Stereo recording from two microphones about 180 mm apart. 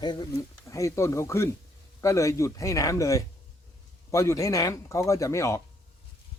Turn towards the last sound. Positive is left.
turn(degrees=15)  # may be behind; listen again after turning